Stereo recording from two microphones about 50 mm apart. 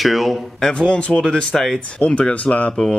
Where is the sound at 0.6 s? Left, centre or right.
Centre.